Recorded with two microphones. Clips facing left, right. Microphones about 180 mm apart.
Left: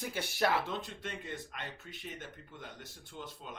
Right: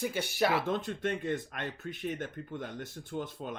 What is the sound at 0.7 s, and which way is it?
Speech, 50° right (ahead or behind).